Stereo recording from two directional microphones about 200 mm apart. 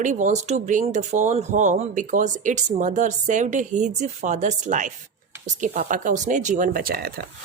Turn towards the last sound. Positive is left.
turn(degrees=-50)  # may be behind; listen again after turning